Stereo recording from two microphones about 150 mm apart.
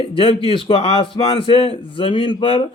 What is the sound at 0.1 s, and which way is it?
Speech, 35° left (ahead or behind).